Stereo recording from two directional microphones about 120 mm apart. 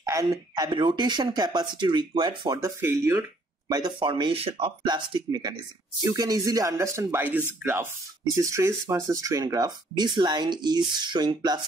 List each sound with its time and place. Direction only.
0.0 s speech: 25° right (ahead or behind)
2.6 s speech: 25° right (ahead or behind)
3.6 s speech: 35° right (ahead or behind)